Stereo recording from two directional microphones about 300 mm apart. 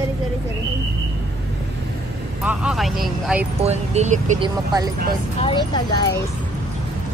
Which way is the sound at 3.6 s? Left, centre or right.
Right.